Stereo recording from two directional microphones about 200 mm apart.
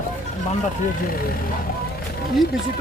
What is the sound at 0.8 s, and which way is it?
Speech, 45° left (ahead or behind).